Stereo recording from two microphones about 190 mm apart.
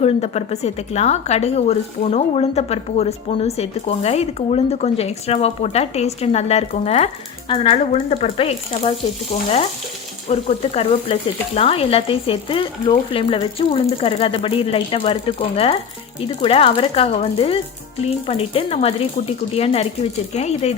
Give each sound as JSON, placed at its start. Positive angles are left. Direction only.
{"t": 0.0, "sound": "a woman's voice", "side_deg": 35}
{"t": 10.2, "sound": "frying", "side_deg": 30}
{"t": 18.0, "sound": "a woman's voice", "side_deg": 30}